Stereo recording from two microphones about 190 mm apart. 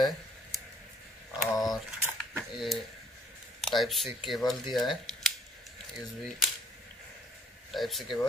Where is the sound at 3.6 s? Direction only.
Centre (ahead or behind).